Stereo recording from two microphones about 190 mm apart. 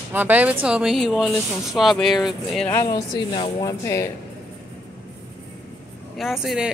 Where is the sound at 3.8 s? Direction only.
15° left (ahead or behind).